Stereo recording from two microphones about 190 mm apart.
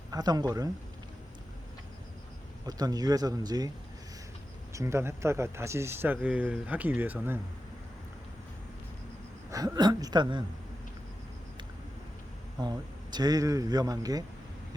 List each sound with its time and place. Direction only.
0.1 s speech: 20° right (ahead or behind)
2.6 s speech: 20° right (ahead or behind)
4.7 s speech: 15° right (ahead or behind)
9.5 s speech: 20° right (ahead or behind)
12.5 s speech: 20° right (ahead or behind)